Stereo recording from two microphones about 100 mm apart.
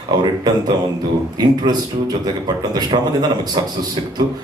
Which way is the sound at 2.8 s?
45° right (ahead or behind).